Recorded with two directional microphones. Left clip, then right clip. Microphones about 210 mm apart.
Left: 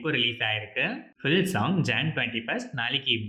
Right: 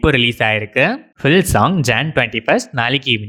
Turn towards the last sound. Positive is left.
turn(degrees=-50)  # may be behind; listen again after turning